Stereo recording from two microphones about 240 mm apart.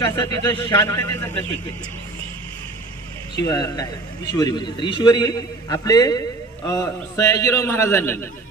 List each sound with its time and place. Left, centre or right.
0.0 s a man's voice: centre
3.4 s a man's voice: centre